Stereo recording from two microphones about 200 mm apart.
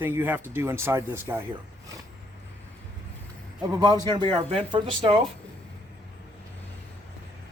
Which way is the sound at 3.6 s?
20° right (ahead or behind).